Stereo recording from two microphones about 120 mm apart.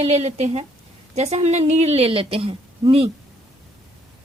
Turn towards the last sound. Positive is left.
turn(degrees=-50)  # may be behind; listen again after turning